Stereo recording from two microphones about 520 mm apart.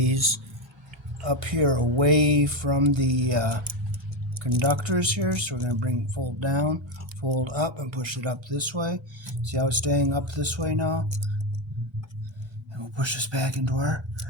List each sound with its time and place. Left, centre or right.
0.0 s speech: right
4.6 s speech: right
7.2 s speech: right
12.7 s speech: right